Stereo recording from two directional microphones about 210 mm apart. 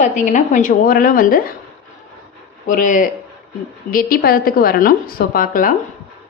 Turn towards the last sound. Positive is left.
turn(degrees=40)  # may be behind; listen again after turning